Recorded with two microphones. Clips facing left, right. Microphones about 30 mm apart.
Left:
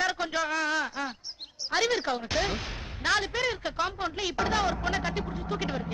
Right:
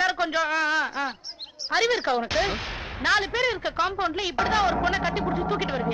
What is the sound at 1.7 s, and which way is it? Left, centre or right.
Speech, centre.